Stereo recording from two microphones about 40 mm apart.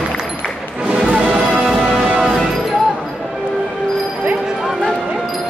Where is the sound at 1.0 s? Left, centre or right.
Right.